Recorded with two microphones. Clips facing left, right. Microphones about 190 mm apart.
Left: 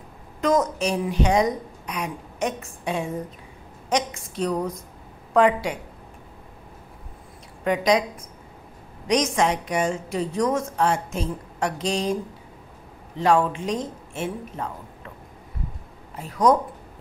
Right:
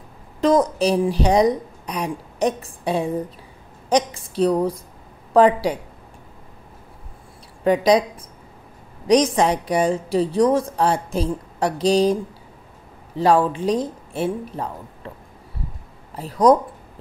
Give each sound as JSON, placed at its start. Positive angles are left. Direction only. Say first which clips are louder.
{"t": 0.4, "sound": "a woman's voice", "louder": "right 4 dB", "side_deg": -30}
{"t": 7.6, "sound": "a woman's voice", "louder": "right 5 dB", "side_deg": -35}
{"t": 9.0, "sound": "a woman's voice", "louder": "right 5 dB", "side_deg": -35}
{"t": 13.2, "sound": "a woman's voice", "louder": "right 3 dB", "side_deg": -35}
{"t": 16.2, "sound": "a woman's voice", "louder": "right 4 dB", "side_deg": -35}